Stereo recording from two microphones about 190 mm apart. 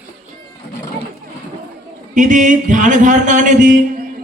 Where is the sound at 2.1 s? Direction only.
40° right (ahead or behind).